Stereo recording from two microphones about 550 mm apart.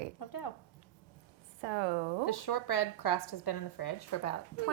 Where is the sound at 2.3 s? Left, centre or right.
Left.